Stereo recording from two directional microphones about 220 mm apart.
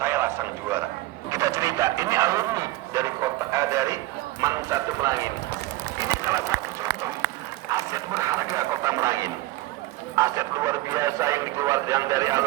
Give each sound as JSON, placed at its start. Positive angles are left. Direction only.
{"t": 0.0, "sound": "a sound", "side_deg": -10}
{"t": 1.3, "sound": "speech", "side_deg": -15}
{"t": 6.0, "sound": "run", "side_deg": -15}
{"t": 7.7, "sound": "speech", "side_deg": -15}